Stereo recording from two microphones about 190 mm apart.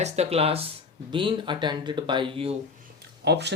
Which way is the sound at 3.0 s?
65° right (ahead or behind).